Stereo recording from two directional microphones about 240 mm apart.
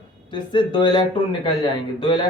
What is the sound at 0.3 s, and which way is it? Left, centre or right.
Speech, centre.